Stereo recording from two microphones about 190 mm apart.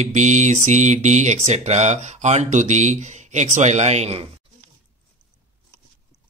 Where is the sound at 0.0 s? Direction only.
40° right (ahead or behind).